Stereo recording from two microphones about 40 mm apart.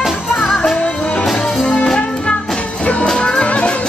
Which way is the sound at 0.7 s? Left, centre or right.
Left.